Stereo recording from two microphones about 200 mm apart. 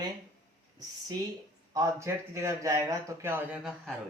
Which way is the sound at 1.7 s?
15° right (ahead or behind).